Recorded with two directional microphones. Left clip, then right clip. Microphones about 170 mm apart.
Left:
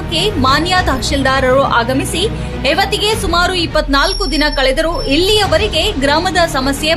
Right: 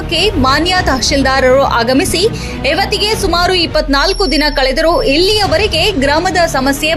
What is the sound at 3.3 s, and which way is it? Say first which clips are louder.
A woman's voice: right 2 dB; 20° right (ahead or behind).